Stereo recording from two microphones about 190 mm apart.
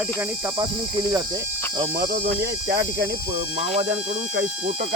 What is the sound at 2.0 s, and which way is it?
Cricket, 55° right (ahead or behind).